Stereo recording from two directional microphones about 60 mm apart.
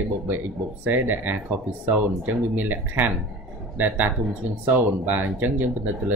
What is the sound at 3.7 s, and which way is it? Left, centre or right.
Speech, right.